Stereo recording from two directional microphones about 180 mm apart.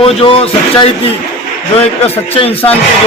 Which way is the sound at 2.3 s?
35° left (ahead or behind).